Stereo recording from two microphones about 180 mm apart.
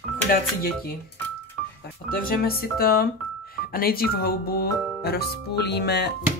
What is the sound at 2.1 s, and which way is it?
Speech, 55° left (ahead or behind).